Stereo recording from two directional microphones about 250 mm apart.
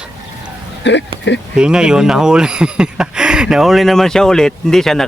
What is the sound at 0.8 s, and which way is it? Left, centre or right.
Speech, left.